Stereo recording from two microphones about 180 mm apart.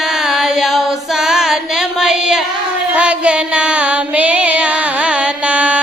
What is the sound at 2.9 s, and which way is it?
Music, 5° right (ahead or behind).